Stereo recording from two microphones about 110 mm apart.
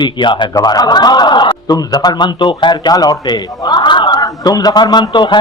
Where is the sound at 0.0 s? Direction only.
45° left (ahead or behind).